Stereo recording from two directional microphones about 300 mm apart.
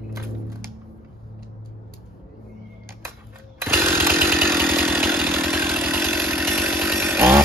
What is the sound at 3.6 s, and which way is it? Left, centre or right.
Chainsaw, centre.